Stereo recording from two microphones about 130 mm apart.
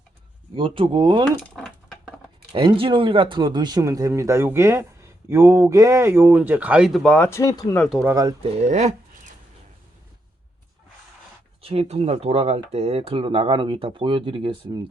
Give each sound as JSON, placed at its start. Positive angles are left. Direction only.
{"t": 0.5, "sound": "speech", "side_deg": -40}
{"t": 2.5, "sound": "speech", "side_deg": -40}
{"t": 7.3, "sound": "speech", "side_deg": 25}
{"t": 7.9, "sound": "speech", "side_deg": -25}
{"t": 8.4, "sound": "speech", "side_deg": -50}
{"t": 11.6, "sound": "speech", "side_deg": -50}